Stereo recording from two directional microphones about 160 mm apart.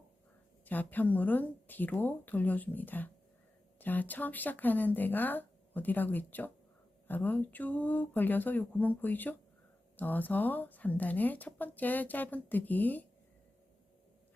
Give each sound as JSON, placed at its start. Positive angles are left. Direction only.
{"t": 0.6, "sound": "speech", "side_deg": 10}